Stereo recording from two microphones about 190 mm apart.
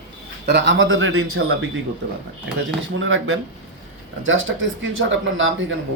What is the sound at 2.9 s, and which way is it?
Speech, 90° right.